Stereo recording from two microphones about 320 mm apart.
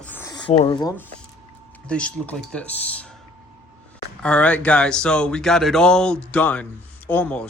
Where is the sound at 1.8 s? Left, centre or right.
Centre.